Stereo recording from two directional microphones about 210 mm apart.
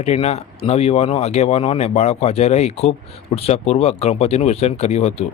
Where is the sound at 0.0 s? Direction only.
30° left (ahead or behind).